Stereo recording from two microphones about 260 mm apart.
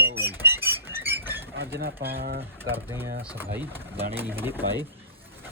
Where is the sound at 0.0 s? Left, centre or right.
Right.